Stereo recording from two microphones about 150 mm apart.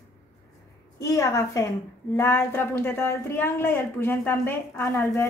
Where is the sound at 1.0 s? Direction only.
20° left (ahead or behind).